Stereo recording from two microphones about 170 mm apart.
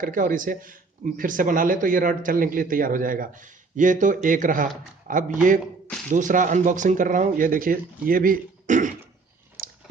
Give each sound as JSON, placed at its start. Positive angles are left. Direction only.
{"t": 0.0, "sound": "a man's voice", "side_deg": -55}